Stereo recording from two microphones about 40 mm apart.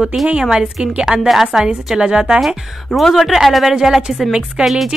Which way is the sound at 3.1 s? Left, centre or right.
Centre.